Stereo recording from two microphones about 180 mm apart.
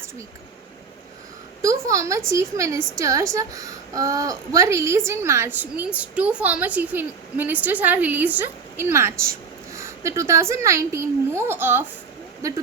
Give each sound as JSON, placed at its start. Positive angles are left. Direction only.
{"t": 1.6, "sound": "a woman's voice", "side_deg": -15}